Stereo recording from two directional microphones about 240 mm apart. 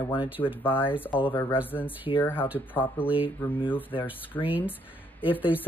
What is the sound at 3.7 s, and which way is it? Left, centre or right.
Speech, centre.